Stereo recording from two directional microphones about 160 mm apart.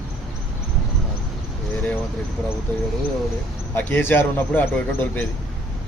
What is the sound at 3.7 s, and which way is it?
Speech, 15° left (ahead or behind).